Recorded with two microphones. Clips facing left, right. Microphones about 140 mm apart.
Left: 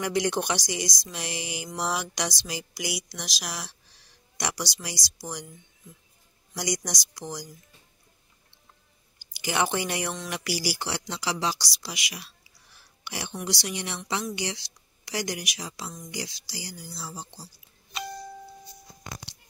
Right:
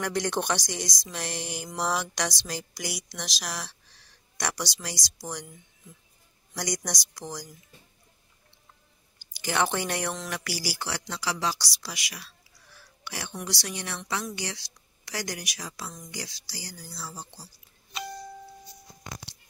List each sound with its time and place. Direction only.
0.0 s a woman's voice: 10° left (ahead or behind)
6.5 s a woman's voice: 10° left (ahead or behind)
9.2 s speech: 10° left (ahead or behind)
10.8 s a woman's voice: 20° left (ahead or behind)